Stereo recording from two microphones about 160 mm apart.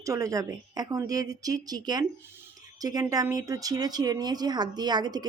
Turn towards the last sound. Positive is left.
turn(degrees=-25)  # may be behind; listen again after turning